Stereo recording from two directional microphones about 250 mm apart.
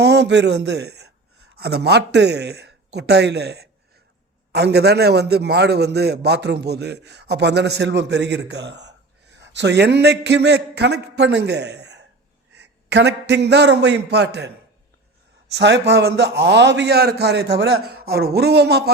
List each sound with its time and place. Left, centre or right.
0.0 s a man's voice: right